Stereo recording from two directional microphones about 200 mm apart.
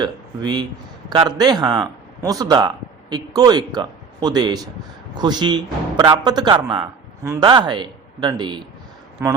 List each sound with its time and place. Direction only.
0.0 s a man's voice: 20° right (ahead or behind)